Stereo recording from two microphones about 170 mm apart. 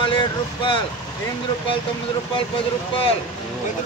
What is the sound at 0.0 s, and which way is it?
Speech, 30° left (ahead or behind).